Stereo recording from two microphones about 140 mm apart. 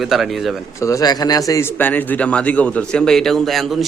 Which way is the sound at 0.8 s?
25° left (ahead or behind).